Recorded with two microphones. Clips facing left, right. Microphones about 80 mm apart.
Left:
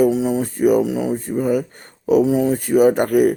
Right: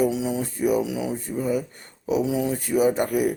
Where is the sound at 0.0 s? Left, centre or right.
Left.